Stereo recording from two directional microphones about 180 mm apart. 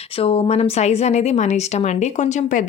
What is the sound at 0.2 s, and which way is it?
A woman's voice, 30° left (ahead or behind).